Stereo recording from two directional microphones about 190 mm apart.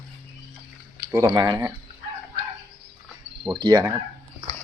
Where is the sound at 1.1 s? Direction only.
15° right (ahead or behind).